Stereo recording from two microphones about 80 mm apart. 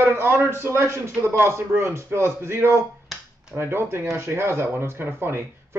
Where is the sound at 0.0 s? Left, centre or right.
Right.